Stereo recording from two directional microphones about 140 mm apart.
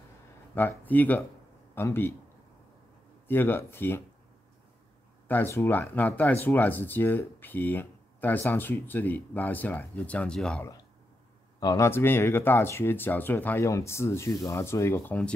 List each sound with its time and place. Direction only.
0.6 s speech: 15° left (ahead or behind)
3.3 s speech: 15° left (ahead or behind)
5.3 s speech: 15° left (ahead or behind)
11.6 s speech: 20° left (ahead or behind)